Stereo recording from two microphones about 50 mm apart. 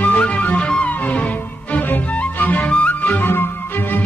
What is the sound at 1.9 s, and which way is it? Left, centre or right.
Music, left.